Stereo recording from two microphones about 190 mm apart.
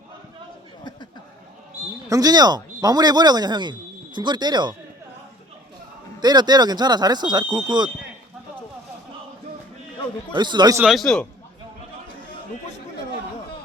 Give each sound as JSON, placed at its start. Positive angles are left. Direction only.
{"t": 2.0, "sound": "speech", "side_deg": -20}
{"t": 6.1, "sound": "speech", "side_deg": -20}
{"t": 10.3, "sound": "speech", "side_deg": -25}
{"t": 10.8, "sound": "a man's voice", "side_deg": 0}